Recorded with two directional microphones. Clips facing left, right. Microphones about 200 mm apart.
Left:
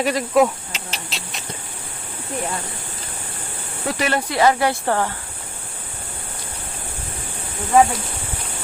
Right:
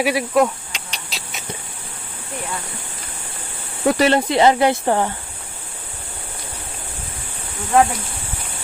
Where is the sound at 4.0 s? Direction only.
25° right (ahead or behind).